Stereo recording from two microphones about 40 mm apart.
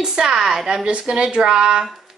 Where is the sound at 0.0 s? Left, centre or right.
Centre.